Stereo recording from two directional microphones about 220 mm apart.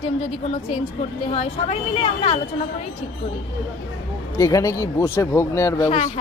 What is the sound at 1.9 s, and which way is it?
Speech, 25° left (ahead or behind).